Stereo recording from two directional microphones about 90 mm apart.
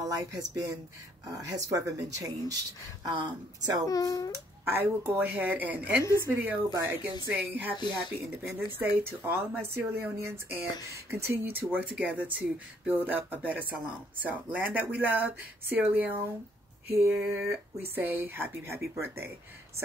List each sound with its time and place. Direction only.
0.0 s speech: 40° right (ahead or behind)
3.9 s a child's voice: 40° left (ahead or behind)
4.6 s speech: 25° right (ahead or behind)
8.7 s speech: 25° right (ahead or behind)